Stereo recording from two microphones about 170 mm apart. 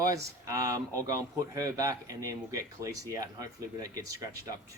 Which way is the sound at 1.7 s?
20° right (ahead or behind).